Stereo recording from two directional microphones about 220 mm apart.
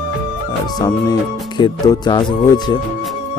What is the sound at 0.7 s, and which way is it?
Speech, 15° left (ahead or behind).